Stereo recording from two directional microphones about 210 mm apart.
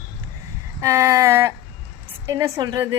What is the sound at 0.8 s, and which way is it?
A woman's voice, 15° right (ahead or behind).